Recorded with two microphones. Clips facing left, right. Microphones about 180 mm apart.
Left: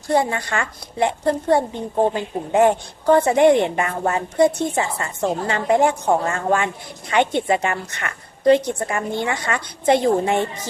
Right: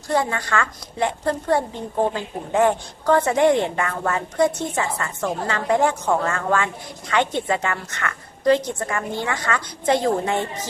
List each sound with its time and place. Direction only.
0.1 s a woman's voice: 20° left (ahead or behind)